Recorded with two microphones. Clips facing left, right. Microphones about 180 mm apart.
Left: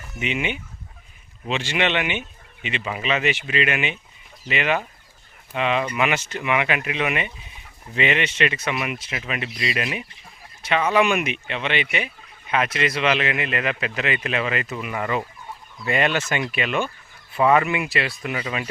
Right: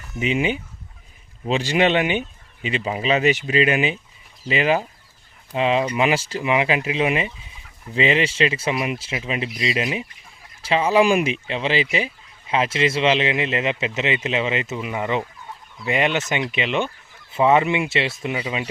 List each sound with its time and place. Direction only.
0.2 s speech: 35° right (ahead or behind); by 18.7 s 20° right (ahead or behind)